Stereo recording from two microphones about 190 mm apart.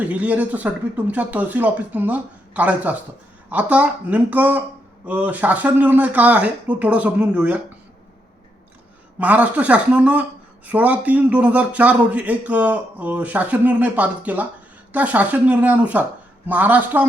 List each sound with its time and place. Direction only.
0.0 s speech: 10° right (ahead or behind)
9.1 s speech: 10° right (ahead or behind)